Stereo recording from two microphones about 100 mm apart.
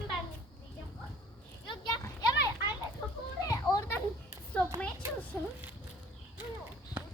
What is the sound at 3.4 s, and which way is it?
Children playing, 35° left (ahead or behind).